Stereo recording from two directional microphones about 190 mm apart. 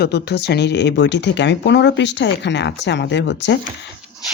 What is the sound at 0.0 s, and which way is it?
Speech, 60° left (ahead or behind).